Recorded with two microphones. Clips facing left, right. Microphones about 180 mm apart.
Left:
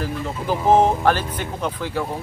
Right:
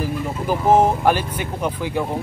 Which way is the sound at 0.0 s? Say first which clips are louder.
Right 2 dB; 10° right (ahead or behind).